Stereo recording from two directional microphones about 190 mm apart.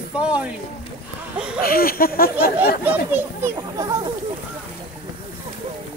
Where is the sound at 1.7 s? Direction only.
50° left (ahead or behind).